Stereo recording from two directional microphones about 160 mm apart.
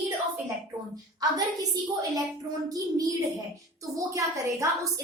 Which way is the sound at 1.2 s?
25° right (ahead or behind).